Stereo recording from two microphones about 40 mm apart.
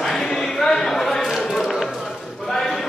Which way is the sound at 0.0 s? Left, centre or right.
Centre.